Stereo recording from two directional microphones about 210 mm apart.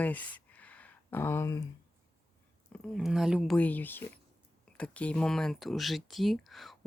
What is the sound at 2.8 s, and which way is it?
Speech, centre (ahead or behind).